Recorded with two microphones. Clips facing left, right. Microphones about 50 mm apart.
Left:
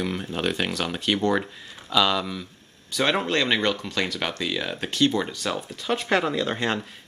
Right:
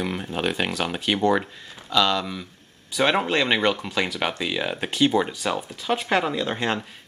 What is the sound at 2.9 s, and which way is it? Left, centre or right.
Speech, centre.